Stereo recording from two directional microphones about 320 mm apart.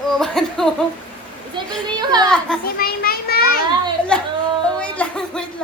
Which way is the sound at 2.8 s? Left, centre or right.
Left.